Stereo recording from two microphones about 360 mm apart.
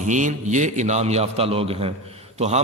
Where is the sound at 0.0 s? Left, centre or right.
Centre.